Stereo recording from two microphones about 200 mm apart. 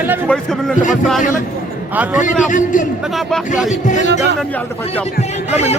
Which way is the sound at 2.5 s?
40° left (ahead or behind).